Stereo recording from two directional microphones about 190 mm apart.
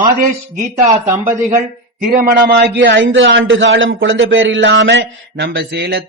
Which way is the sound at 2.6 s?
75° right (ahead or behind).